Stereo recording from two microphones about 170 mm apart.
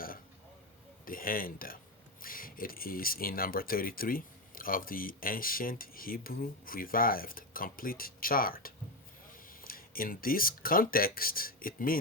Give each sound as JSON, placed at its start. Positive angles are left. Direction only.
{"t": 1.0, "sound": "speech", "side_deg": 55}